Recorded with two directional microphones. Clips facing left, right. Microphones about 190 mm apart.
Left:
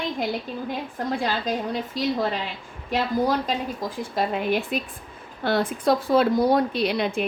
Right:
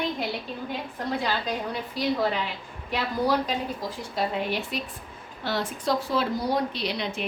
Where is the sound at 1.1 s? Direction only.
45° left (ahead or behind).